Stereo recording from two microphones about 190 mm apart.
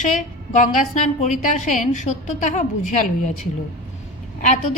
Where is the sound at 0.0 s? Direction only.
40° left (ahead or behind).